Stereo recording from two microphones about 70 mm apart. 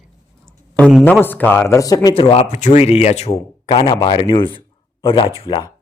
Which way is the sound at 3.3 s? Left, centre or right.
Left.